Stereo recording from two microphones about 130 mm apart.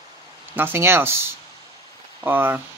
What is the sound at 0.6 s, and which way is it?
Speech, 15° right (ahead or behind).